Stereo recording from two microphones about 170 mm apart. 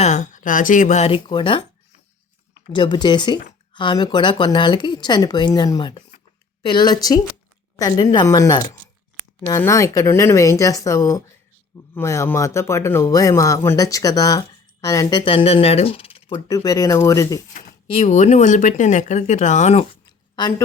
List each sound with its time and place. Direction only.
0.0 s speech: 45° left (ahead or behind); by 1.6 s 30° left (ahead or behind)
2.7 s speech: 25° left (ahead or behind)
15.2 s speech: 35° left (ahead or behind)
16.5 s speech: 20° left (ahead or behind)
17.8 s speech: 40° left (ahead or behind)
20.3 s speech: 25° left (ahead or behind)